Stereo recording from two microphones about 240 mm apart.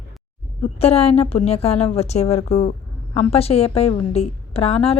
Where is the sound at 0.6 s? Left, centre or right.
Left.